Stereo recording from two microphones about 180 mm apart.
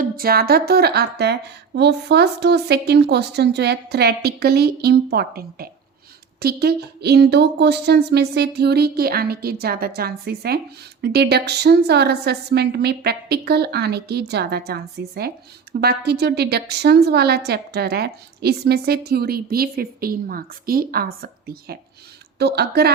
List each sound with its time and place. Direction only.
0.0 s a woman's voice: 55° right (ahead or behind)